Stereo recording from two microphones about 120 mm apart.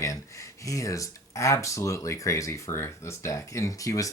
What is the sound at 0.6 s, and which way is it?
Speech, 25° left (ahead or behind).